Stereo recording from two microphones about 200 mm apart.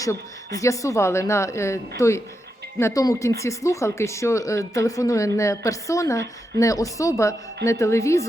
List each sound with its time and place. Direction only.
0.0 s speech: 15° left (ahead or behind)